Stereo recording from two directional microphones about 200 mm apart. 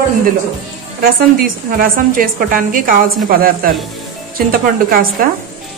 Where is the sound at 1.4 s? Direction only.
45° right (ahead or behind).